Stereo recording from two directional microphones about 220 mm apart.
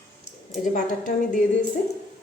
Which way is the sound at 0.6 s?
35° left (ahead or behind).